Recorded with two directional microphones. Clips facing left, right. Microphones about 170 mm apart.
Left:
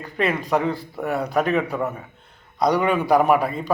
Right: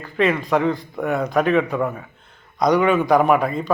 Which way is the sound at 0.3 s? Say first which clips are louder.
Right 2 dB; 10° left (ahead or behind).